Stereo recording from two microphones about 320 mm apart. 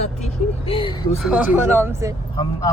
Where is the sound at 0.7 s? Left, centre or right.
Centre.